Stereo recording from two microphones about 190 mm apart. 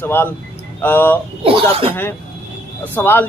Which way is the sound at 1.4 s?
30° right (ahead or behind).